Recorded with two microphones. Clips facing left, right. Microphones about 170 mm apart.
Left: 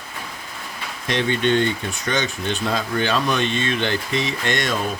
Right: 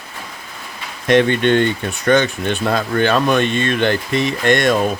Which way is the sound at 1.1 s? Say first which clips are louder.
Right 7 dB; 60° right (ahead or behind).